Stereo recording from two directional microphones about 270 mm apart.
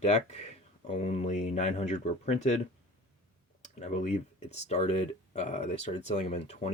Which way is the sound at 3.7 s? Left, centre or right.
Left.